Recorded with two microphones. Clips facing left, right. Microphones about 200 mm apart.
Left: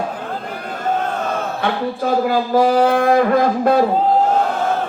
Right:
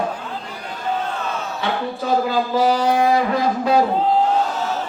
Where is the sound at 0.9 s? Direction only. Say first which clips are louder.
Left 4 dB; 50° left (ahead or behind).